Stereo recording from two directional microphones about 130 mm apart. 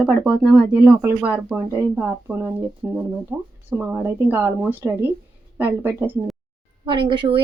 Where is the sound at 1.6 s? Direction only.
15° right (ahead or behind).